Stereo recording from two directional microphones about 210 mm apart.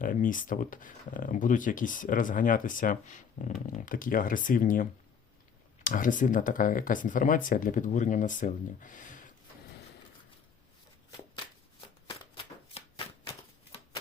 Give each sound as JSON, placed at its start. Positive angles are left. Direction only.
{"t": 0.0, "sound": "speech", "side_deg": 40}
{"t": 12.0, "sound": "shuffling cards", "side_deg": 25}